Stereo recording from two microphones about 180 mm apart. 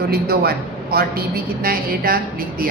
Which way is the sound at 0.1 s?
60° right (ahead or behind).